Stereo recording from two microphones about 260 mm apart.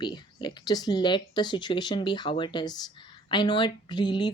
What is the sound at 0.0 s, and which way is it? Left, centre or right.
Speech, centre.